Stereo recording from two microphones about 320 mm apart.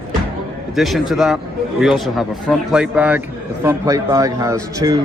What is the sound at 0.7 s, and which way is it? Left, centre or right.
A man's voice, centre.